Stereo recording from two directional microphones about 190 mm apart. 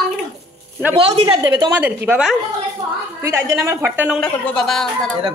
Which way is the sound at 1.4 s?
15° right (ahead or behind).